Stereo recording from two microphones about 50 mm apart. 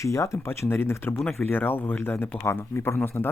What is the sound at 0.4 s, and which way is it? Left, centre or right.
A man's voice, left.